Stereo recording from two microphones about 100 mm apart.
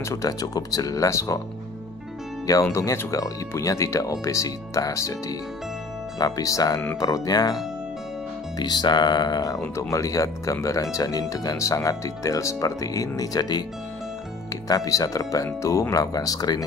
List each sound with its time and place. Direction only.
0.0 s speech: 30° left (ahead or behind)
2.4 s speech: 30° left (ahead or behind)
6.1 s speech: 35° left (ahead or behind)
8.5 s speech: 45° left (ahead or behind)
9.6 s speech: 30° left (ahead or behind)
14.9 s speech: 35° left (ahead or behind)